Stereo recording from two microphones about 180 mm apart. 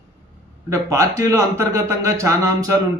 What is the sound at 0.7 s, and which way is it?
Speech, 20° right (ahead or behind).